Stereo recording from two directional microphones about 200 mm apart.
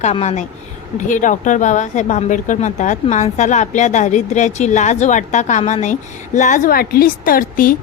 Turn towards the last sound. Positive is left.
turn(degrees=45)  # may be behind; listen again after turning